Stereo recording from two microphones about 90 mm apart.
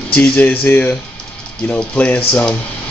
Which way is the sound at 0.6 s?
20° left (ahead or behind).